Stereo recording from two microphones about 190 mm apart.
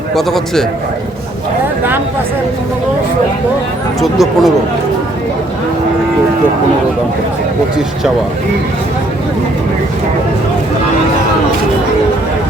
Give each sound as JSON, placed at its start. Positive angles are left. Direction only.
{"t": 0.2, "sound": "speech", "side_deg": 0}
{"t": 4.0, "sound": "speech", "side_deg": 0}